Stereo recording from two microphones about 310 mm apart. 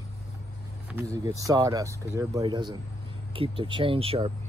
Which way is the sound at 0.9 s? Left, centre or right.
Centre.